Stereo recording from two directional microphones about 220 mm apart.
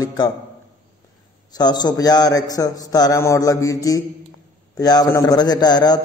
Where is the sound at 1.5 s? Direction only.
20° left (ahead or behind).